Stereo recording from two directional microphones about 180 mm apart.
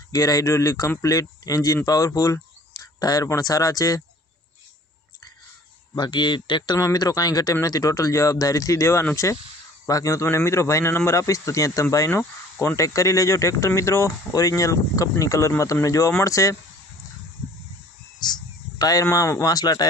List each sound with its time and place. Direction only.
0.1 s speech: 20° left (ahead or behind)
5.9 s a man's voice: 25° left (ahead or behind)
18.2 s speech: 25° left (ahead or behind)